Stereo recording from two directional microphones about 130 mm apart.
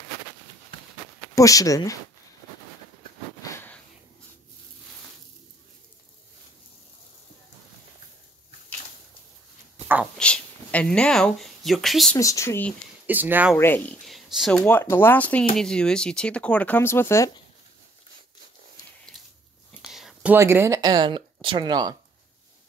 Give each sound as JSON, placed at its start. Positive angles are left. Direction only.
{"t": 1.3, "sound": "speech", "side_deg": 25}
{"t": 3.4, "sound": "sniff", "side_deg": 20}
{"t": 10.1, "sound": "a sound", "side_deg": 10}
{"t": 12.2, "sound": "speech", "side_deg": 25}
{"t": 13.0, "sound": "speech", "side_deg": -15}
{"t": 13.6, "sound": "speech", "side_deg": 15}
{"t": 14.0, "sound": "speech", "side_deg": 0}
{"t": 19.1, "sound": "a sound", "side_deg": 0}
{"t": 19.9, "sound": "whispering", "side_deg": 0}
{"t": 20.3, "sound": "speech", "side_deg": -20}